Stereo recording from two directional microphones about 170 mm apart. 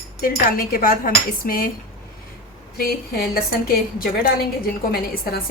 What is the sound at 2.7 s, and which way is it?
A woman's voice, 60° left (ahead or behind).